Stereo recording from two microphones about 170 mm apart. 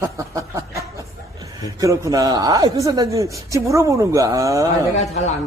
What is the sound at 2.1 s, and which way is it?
A woman's voice, 20° right (ahead or behind).